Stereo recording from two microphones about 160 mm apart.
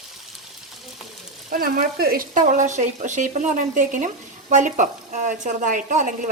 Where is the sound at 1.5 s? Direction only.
65° right (ahead or behind).